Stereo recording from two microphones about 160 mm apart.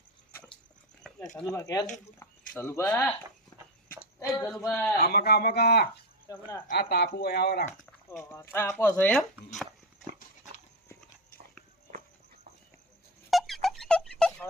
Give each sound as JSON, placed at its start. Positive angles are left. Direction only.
{"t": 1.0, "sound": "a sound", "side_deg": 5}
{"t": 1.5, "sound": "speech", "side_deg": 20}
{"t": 4.3, "sound": "speech", "side_deg": 5}
{"t": 4.9, "sound": "speech", "side_deg": 75}
{"t": 6.3, "sound": "speech", "side_deg": 20}
{"t": 6.7, "sound": "speech", "side_deg": 80}
{"t": 8.2, "sound": "speech", "side_deg": 15}
{"t": 13.3, "sound": "a sound", "side_deg": 0}